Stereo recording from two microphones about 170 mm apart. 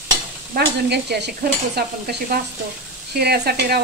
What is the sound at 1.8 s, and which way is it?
Stir, 65° right (ahead or behind).